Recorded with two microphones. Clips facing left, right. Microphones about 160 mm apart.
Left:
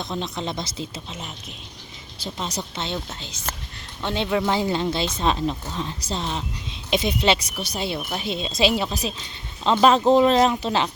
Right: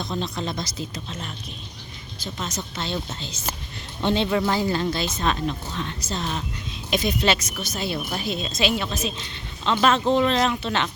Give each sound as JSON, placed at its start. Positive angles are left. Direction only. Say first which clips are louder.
{"t": 0.0, "sound": "a woman's voice", "louder": "even", "side_deg": 20}
{"t": 0.9, "sound": "speech", "louder": "right 1 dB", "side_deg": 10}
{"t": 2.1, "sound": "speech", "louder": "left 2 dB", "side_deg": 30}
{"t": 4.0, "sound": "speech", "louder": "right 1 dB", "side_deg": 5}
{"t": 4.5, "sound": "a woman's voice", "louder": "left 1 dB", "side_deg": 20}